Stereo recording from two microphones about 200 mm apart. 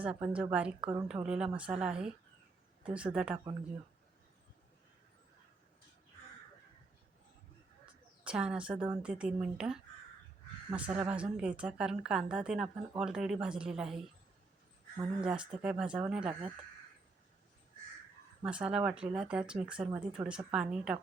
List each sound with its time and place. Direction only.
0.0 s a woman's voice: 5° right (ahead or behind)
8.2 s speech: 5° right (ahead or behind)
10.8 s a woman's voice: 5° right (ahead or behind)
15.2 s speech: 5° right (ahead or behind)
18.4 s speech: 5° right (ahead or behind)